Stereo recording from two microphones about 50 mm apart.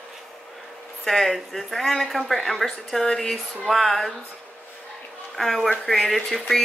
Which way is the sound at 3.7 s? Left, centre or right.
Centre.